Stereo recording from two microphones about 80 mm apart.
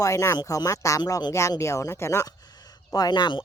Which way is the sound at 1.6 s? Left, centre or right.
Left.